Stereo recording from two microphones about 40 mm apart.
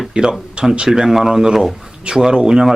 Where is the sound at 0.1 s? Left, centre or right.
Right.